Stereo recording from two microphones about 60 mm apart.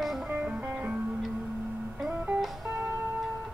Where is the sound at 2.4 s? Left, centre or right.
Centre.